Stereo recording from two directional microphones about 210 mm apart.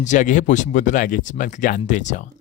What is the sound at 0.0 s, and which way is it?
Speech, 35° left (ahead or behind).